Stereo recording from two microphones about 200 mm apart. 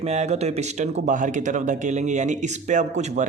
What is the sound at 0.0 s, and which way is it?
Speech, 35° right (ahead or behind).